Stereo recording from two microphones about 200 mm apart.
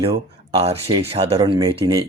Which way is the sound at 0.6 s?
30° right (ahead or behind).